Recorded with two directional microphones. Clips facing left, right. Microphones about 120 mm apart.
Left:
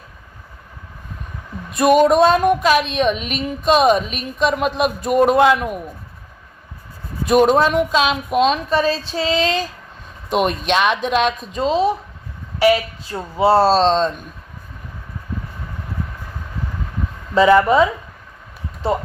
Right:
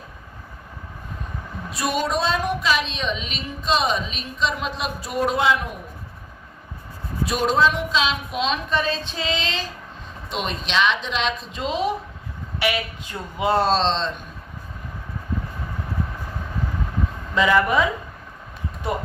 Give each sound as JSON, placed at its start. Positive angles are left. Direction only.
{"t": 1.7, "sound": "a woman's voice", "side_deg": 55}
{"t": 7.3, "sound": "a woman's voice", "side_deg": 55}
{"t": 17.3, "sound": "speech", "side_deg": 30}